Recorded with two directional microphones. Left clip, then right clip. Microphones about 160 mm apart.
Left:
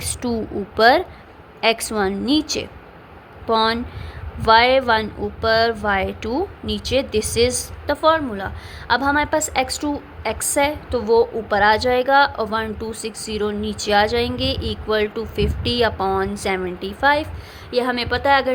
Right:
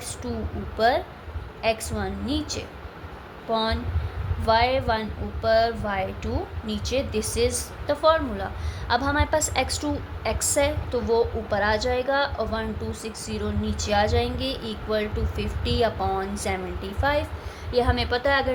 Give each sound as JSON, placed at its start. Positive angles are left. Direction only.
{"t": 0.0, "sound": "a sound", "side_deg": 90}
{"t": 0.8, "sound": "a woman's voice", "side_deg": 80}
{"t": 17.7, "sound": "a woman's voice", "side_deg": 45}